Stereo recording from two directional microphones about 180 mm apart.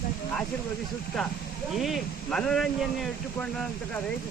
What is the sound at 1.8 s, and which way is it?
Speech, centre (ahead or behind).